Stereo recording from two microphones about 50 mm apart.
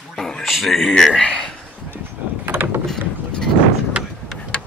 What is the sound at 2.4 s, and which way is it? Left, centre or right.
Mechanisms, right.